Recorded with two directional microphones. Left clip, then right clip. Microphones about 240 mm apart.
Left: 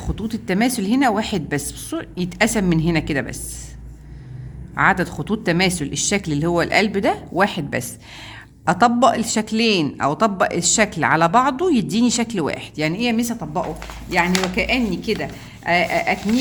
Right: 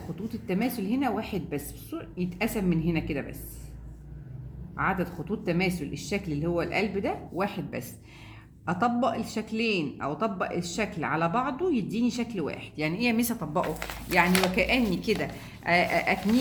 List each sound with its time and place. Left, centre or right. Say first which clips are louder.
0.2 s a woman's voice: left 10 dB; left
4.8 s a woman's voice: left 12 dB; left; by 16.3 s centre